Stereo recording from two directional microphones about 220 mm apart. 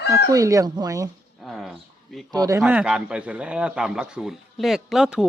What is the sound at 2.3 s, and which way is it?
Speech, 15° right (ahead or behind).